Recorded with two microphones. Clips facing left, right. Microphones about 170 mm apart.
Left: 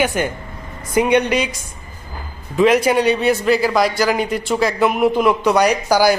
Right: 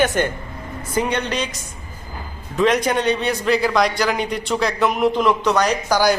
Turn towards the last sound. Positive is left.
turn(degrees=10)  # may be behind; listen again after turning